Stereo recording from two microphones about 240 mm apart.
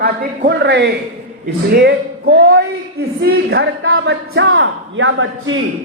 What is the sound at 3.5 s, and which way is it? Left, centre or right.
Speech, right.